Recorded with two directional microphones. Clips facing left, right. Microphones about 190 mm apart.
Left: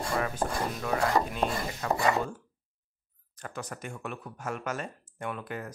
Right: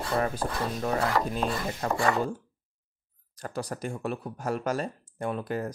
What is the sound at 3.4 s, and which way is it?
Speech, 35° right (ahead or behind).